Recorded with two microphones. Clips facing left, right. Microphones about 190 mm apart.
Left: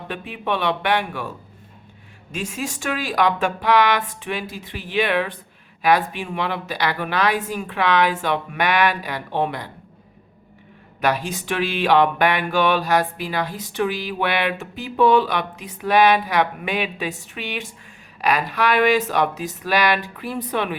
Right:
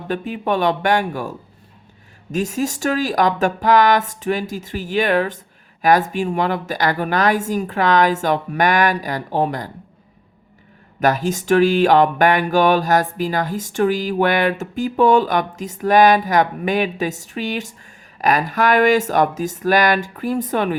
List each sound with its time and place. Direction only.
0.1 s speech: 45° right (ahead or behind)
2.3 s speech: 40° right (ahead or behind)
11.0 s speech: 45° right (ahead or behind)